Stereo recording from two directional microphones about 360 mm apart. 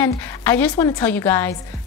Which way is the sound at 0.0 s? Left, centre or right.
Centre.